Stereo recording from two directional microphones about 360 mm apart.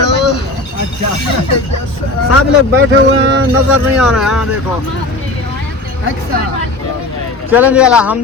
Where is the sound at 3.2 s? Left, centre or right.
Right.